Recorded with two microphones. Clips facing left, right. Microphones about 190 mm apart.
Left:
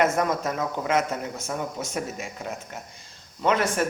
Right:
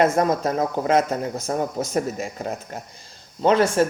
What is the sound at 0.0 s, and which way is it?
Speech, 35° right (ahead or behind).